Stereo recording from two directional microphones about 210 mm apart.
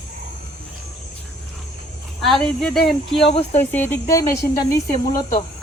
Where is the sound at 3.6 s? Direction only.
10° left (ahead or behind).